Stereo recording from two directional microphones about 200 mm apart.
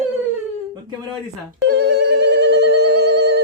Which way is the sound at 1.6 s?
55° right (ahead or behind).